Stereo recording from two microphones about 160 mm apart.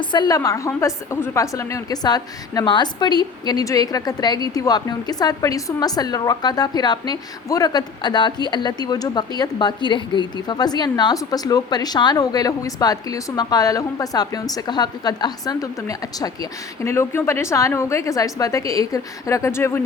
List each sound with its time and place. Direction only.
0.0 s a woman's voice: 25° left (ahead or behind)